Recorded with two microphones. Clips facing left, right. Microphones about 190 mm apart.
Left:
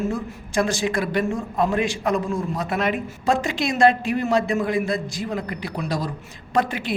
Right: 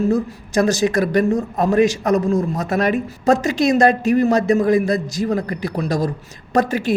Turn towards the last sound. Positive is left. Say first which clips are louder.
# right 5 dB
turn(degrees=-45)  # may be behind; listen again after turning